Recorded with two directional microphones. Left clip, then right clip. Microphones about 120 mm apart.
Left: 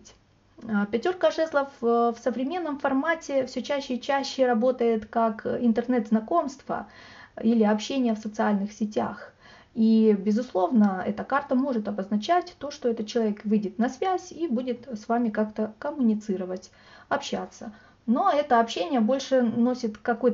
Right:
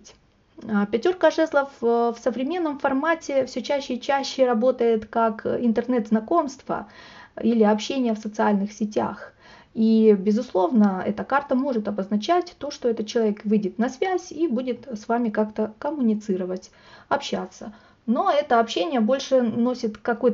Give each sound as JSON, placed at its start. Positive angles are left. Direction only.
{"t": 0.6, "sound": "speech", "side_deg": -45}